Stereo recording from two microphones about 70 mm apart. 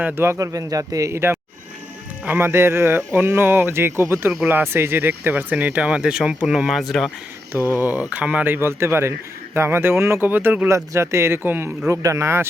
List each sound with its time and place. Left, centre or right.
0.0 s speech: right
0.3 s speech: right
1.1 s speech: right
2.4 s speech: right; by 7.1 s centre
7.8 s speech: right
8.5 s speech: right
10.7 s speech: right
11.9 s speech: right